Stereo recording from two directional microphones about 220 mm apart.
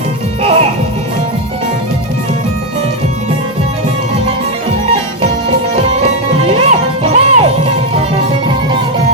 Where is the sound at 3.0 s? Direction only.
30° right (ahead or behind).